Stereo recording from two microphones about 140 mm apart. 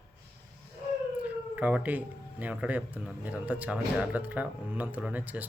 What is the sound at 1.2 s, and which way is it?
Speech, 10° right (ahead or behind).